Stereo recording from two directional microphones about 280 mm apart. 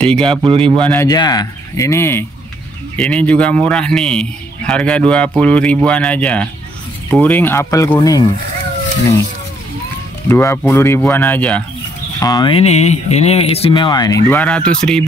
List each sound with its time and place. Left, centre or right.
0.2 s speech: centre
0.8 s a man's voice: centre
10.2 s speech: centre